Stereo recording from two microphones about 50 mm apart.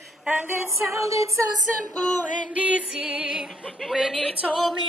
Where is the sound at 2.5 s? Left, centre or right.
Right.